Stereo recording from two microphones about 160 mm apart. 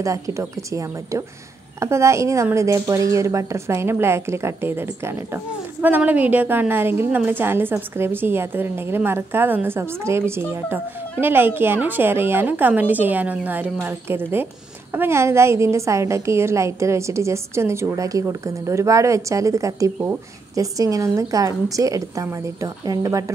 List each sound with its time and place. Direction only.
0.0 s a woman's voice: 20° right (ahead or behind)